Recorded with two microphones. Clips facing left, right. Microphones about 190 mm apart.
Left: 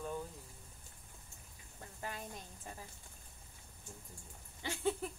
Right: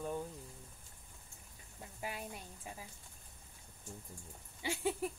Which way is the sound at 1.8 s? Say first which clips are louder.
Right 1 dB; 10° right (ahead or behind).